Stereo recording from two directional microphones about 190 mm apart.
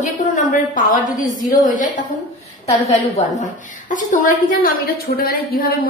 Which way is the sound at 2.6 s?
35° left (ahead or behind).